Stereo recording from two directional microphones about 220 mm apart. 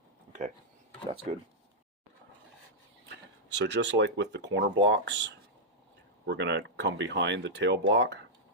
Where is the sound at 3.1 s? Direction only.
55° right (ahead or behind).